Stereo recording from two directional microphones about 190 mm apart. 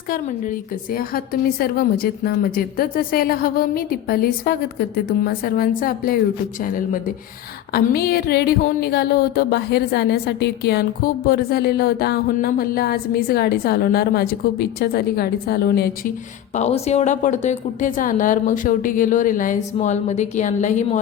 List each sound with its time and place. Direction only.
0.1 s a woman's voice: 45° left (ahead or behind)
7.7 s a sound: 55° left (ahead or behind)
16.6 s a woman's voice: 35° left (ahead or behind)